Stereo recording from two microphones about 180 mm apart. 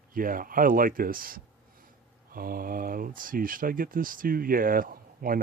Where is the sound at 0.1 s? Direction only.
50° right (ahead or behind).